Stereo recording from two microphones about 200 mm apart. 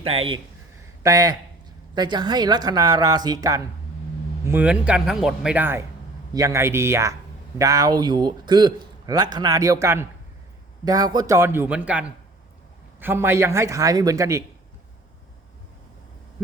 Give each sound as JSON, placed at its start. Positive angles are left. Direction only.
{"t": 0.0, "sound": "a man's voice", "side_deg": -30}
{"t": 1.0, "sound": "a man's voice", "side_deg": -15}